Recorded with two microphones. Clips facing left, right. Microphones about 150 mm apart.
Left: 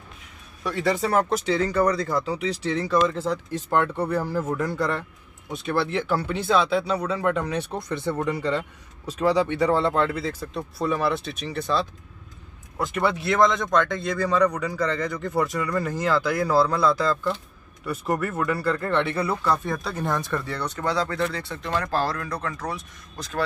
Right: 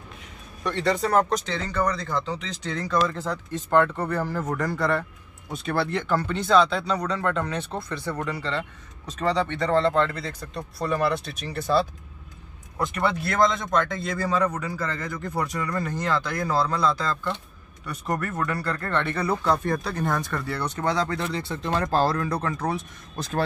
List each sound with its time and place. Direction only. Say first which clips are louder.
0.7 s speech: even; 5° left (ahead or behind)
8.0 s speech: left 7 dB; 20° left (ahead or behind); by 20.6 s centre (ahead or behind)
20.6 s speech: right 2 dB; 20° right (ahead or behind)